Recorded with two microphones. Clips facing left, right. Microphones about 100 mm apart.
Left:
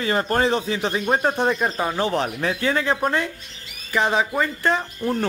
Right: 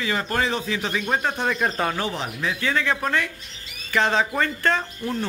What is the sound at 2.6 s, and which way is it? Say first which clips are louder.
Speech: left 2 dB; 30° left (ahead or behind).